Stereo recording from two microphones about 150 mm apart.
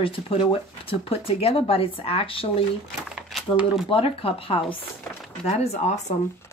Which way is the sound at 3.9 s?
40° left (ahead or behind).